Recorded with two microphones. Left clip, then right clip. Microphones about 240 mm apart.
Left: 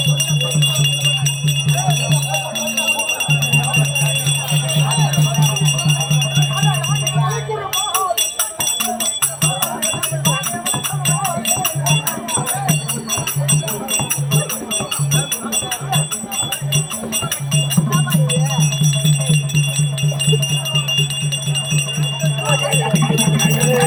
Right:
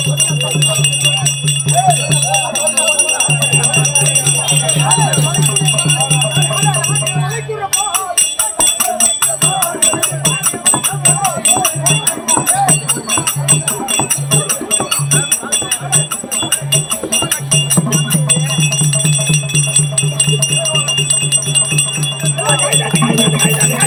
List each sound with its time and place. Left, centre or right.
0.2 s music: centre
11.0 s music: centre
18.1 s jingle bell: centre
22.5 s jingle bell: centre